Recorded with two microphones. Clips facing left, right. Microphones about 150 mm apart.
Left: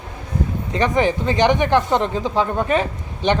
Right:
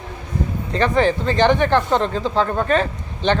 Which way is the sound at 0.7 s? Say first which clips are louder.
Right 1 dB; 15° left (ahead or behind).